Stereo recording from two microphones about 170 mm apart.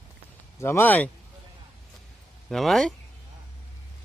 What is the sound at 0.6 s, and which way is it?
Speech, 15° left (ahead or behind).